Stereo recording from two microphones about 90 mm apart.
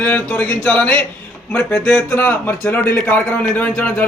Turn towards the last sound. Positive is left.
turn(degrees=20)  # may be behind; listen again after turning